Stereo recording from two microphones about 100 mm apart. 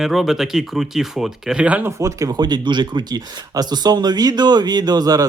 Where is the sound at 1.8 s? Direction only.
30° right (ahead or behind).